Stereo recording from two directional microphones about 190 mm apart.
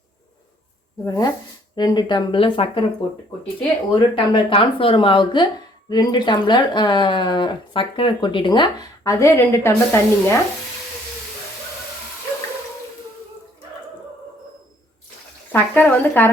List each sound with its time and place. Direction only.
1.0 s speech: 20° left (ahead or behind)
3.9 s speech: 25° left (ahead or behind)
15.5 s speech: 10° left (ahead or behind)